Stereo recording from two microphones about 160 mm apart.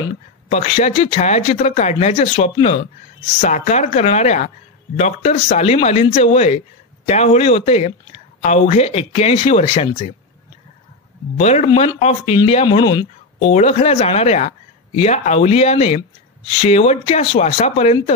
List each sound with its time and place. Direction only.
0.5 s speech: 45° left (ahead or behind)
11.3 s speech: 40° left (ahead or behind)
13.4 s speech: 45° left (ahead or behind)